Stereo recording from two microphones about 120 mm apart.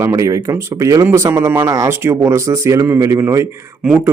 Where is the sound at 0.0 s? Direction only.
25° right (ahead or behind).